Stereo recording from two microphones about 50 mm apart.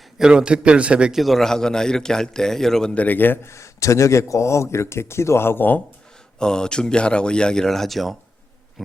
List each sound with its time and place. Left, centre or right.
0.2 s a man's voice: centre
1.1 s a man's voice: centre
2.9 s a man's voice: left
3.4 s a man's voice: left
6.4 s a man's voice: centre